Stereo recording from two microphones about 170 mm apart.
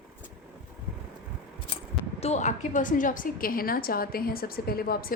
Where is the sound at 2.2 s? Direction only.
40° left (ahead or behind).